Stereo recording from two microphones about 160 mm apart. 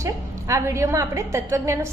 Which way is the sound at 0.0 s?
20° right (ahead or behind).